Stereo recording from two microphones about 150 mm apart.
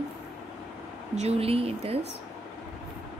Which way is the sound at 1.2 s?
40° right (ahead or behind).